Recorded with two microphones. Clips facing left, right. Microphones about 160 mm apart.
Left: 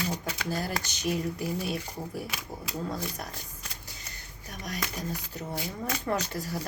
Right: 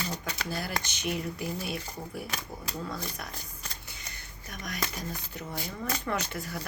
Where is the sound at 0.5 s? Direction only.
40° left (ahead or behind).